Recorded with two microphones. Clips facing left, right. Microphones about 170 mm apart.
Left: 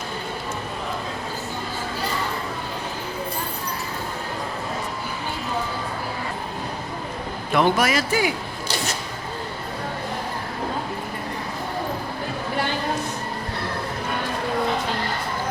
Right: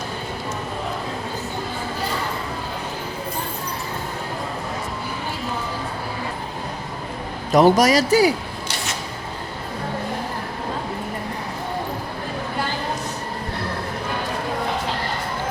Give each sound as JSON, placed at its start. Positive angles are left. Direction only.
{"t": 7.5, "sound": "speech", "side_deg": -40}